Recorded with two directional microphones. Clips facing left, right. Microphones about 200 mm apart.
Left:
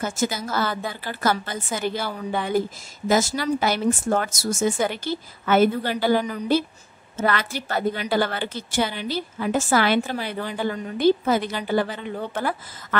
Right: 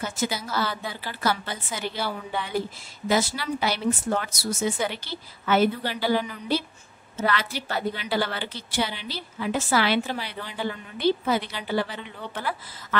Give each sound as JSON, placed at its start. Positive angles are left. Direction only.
{"t": 0.0, "sound": "a woman's voice", "side_deg": 45}